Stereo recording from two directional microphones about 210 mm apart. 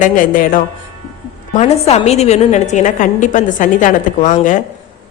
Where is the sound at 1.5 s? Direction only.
30° left (ahead or behind).